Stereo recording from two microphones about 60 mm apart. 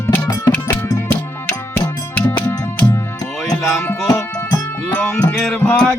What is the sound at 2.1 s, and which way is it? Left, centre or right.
Music, left.